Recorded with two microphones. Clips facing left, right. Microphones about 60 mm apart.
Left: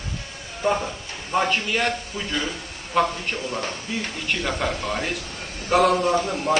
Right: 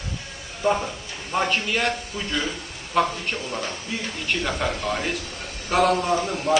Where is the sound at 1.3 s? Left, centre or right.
Centre.